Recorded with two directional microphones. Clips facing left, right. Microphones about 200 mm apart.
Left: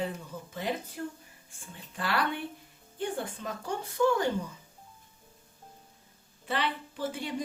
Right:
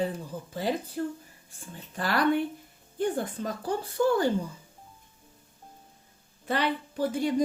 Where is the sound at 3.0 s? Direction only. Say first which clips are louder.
Right 5 dB; 35° right (ahead or behind).